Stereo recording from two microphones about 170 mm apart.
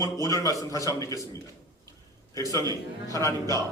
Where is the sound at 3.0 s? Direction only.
20° left (ahead or behind).